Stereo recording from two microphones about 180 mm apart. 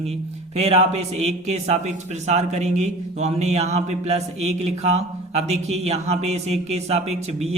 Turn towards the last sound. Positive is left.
turn(degrees=-35)  # may be behind; listen again after turning